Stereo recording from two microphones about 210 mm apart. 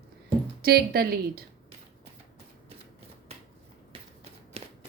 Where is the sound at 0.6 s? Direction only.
45° right (ahead or behind).